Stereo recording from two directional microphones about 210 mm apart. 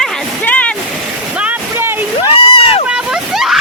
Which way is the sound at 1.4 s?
10° right (ahead or behind).